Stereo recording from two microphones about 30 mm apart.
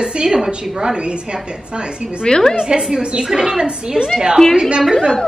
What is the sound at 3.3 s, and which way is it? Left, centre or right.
Speech, centre.